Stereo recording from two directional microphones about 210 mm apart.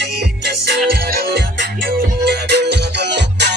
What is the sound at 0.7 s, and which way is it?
Music, 50° right (ahead or behind).